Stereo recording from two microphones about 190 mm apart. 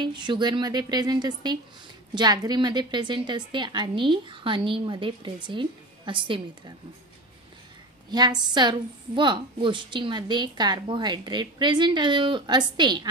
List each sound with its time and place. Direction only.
0.0 s a woman's voice: 25° right (ahead or behind)
8.1 s a woman's voice: 20° right (ahead or behind)